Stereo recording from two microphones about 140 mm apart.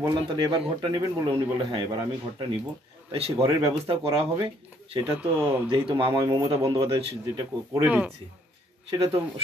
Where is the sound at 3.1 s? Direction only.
45° right (ahead or behind).